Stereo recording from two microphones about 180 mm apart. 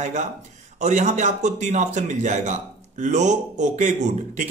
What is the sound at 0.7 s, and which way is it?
A man's voice, 40° right (ahead or behind).